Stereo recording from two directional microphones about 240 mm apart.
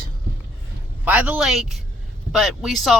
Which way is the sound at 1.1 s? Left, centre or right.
Centre.